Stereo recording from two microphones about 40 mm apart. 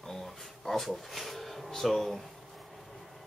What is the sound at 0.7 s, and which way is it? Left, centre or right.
Speech, centre.